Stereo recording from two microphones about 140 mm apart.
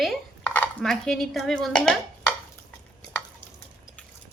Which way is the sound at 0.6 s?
5° left (ahead or behind).